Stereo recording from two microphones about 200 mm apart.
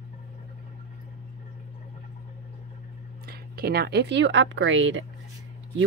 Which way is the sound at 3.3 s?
50° right (ahead or behind).